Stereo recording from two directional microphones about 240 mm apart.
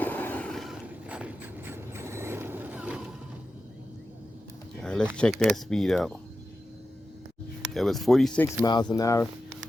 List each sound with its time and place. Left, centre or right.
0.0 s vehicle: centre
4.8 s a sound: centre
5.1 s speech: centre
7.7 s speech: centre
8.6 s speech: centre